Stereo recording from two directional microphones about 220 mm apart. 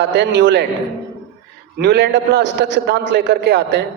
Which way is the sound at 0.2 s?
50° right (ahead or behind).